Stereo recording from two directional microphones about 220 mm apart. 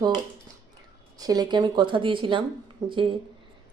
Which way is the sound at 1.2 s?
15° right (ahead or behind).